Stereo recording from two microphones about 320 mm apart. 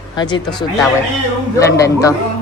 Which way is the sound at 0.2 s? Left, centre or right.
Centre.